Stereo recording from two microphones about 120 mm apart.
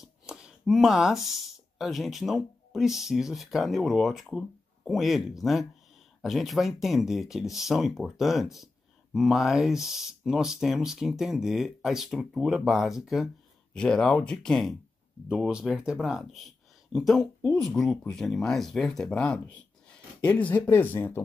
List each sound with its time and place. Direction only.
0.0 s speech: 5° right (ahead or behind); by 21.2 s 15° left (ahead or behind)